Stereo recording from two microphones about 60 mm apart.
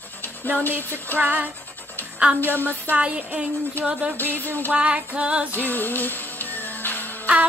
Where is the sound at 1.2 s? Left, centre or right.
Right.